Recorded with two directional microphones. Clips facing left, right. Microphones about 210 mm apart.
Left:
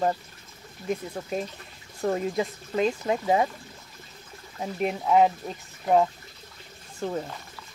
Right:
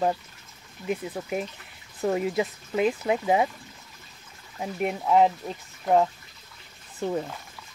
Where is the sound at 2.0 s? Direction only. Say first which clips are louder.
Right 1 dB; 10° right (ahead or behind).